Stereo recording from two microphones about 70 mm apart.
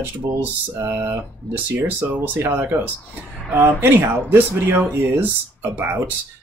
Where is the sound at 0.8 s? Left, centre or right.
Right.